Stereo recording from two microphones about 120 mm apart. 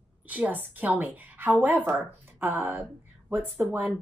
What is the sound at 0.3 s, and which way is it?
A woman's voice, 15° right (ahead or behind).